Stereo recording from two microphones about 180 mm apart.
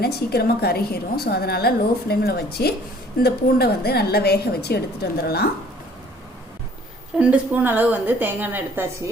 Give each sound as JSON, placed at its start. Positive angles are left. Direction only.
{"t": 0.0, "sound": "a woman's voice", "side_deg": 60}
{"t": 7.2, "sound": "a woman's voice", "side_deg": -10}